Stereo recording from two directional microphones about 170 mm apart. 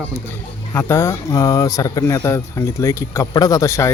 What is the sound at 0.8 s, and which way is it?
Speech, 15° left (ahead or behind).